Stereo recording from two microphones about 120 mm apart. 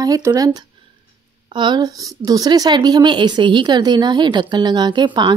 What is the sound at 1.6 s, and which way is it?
Speech, 35° right (ahead or behind).